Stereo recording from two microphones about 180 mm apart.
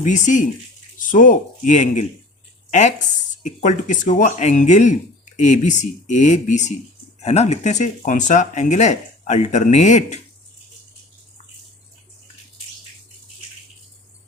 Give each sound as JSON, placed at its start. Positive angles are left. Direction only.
{"t": 0.0, "sound": "speech", "side_deg": 45}
{"t": 2.6, "sound": "a sound", "side_deg": 40}
{"t": 3.4, "sound": "speech", "side_deg": 45}